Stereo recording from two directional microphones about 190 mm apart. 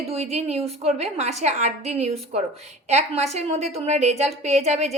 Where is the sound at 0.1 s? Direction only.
35° right (ahead or behind).